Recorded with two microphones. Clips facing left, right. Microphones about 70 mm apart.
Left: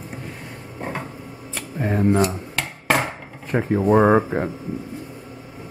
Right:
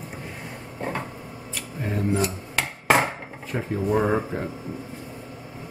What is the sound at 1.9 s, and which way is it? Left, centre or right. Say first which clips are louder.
Speech: left 6 dB; left.